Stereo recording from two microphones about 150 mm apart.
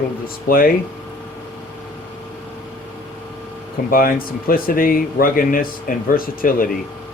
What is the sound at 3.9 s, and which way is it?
Speech, 75° left (ahead or behind).